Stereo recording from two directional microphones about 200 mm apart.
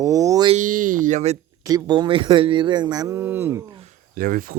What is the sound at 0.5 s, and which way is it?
Speech, 40° right (ahead or behind).